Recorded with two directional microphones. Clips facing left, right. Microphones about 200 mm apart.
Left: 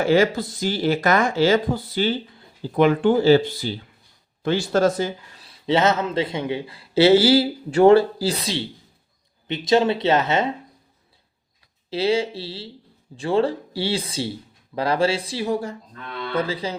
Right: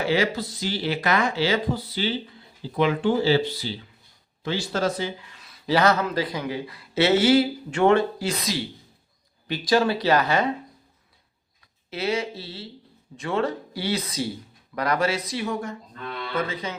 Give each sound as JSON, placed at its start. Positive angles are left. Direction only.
{"t": 0.0, "sound": "a man's voice", "side_deg": 45}
{"t": 11.9, "sound": "a man's voice", "side_deg": 30}